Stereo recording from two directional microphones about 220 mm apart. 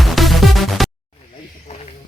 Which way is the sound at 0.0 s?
Centre (ahead or behind).